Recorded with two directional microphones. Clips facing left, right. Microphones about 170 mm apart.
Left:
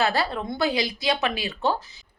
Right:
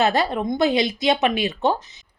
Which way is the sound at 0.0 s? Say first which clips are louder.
Right 4 dB; 20° right (ahead or behind).